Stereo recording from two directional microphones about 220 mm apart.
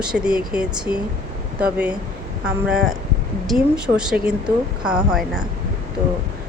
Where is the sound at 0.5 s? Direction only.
5° right (ahead or behind).